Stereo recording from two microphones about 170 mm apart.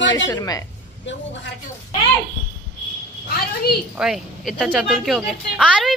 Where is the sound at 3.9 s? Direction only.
5° right (ahead or behind).